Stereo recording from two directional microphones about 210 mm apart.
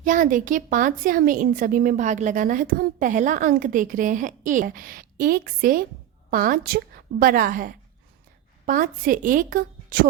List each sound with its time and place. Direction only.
0.0 s a woman's voice: 40° right (ahead or behind)